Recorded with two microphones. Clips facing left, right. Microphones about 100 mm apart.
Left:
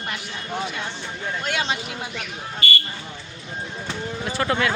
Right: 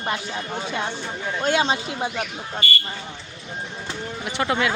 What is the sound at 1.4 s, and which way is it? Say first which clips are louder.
Speech: right 7 dB; 30° right (ahead or behind).